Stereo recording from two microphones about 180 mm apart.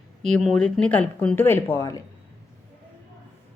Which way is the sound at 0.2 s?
Centre (ahead or behind).